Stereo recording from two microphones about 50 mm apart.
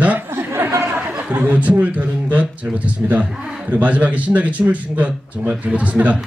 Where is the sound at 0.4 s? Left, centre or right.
Right.